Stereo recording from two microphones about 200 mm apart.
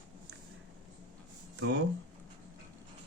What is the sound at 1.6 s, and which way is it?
Speech, 60° right (ahead or behind).